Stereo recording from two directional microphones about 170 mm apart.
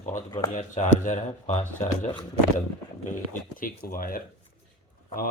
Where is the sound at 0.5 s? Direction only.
45° left (ahead or behind).